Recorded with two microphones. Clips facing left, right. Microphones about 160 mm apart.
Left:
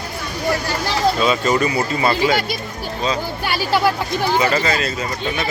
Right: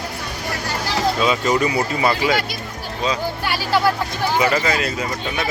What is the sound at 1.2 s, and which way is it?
Speech, 15° right (ahead or behind).